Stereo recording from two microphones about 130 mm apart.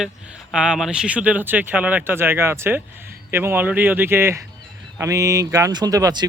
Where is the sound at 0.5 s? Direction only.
5° right (ahead or behind).